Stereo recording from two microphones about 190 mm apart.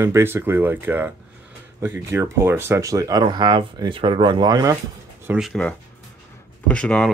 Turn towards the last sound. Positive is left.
turn(degrees=5)  # may be behind; listen again after turning